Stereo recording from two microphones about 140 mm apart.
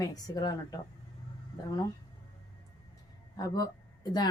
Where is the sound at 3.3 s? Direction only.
25° left (ahead or behind).